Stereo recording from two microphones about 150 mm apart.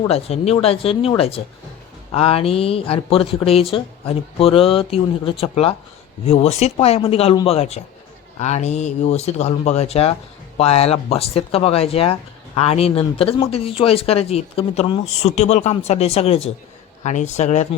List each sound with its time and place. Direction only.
0.1 s speech: 40° left (ahead or behind)